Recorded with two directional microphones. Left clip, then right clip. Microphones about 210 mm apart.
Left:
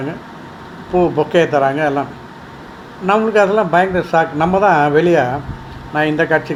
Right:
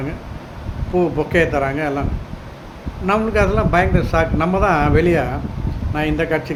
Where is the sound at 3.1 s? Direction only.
Centre (ahead or behind).